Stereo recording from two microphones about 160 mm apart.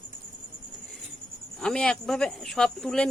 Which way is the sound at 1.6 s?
5° left (ahead or behind).